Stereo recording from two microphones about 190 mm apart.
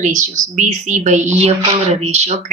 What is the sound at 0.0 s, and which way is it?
Speech, 40° right (ahead or behind).